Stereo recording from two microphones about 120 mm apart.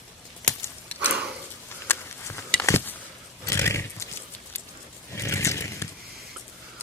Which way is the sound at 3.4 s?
25° left (ahead or behind).